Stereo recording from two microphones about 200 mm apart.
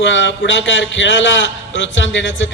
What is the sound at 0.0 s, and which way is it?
A man's voice, 65° left (ahead or behind).